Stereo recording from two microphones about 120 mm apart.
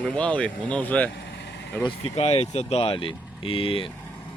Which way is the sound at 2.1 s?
55° left (ahead or behind).